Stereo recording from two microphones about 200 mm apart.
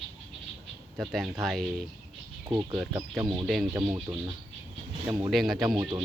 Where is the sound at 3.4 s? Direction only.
Centre (ahead or behind).